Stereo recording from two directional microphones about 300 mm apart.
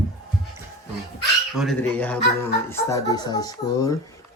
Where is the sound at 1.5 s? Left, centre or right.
Centre.